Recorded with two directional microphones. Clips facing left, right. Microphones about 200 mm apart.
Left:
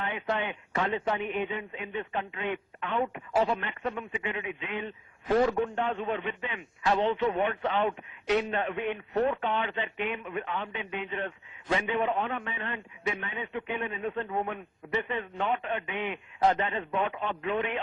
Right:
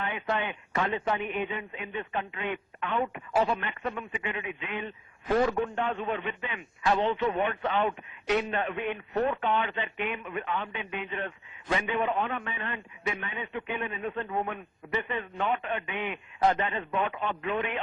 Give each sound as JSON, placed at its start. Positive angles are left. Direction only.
{"t": 0.0, "sound": "a man's voice", "side_deg": 30}